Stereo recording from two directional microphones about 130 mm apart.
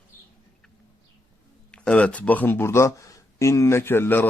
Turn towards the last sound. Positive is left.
turn(degrees=15)  # may be behind; listen again after turning